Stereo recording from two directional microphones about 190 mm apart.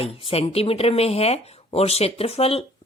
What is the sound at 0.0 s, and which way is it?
Speech, 30° left (ahead or behind).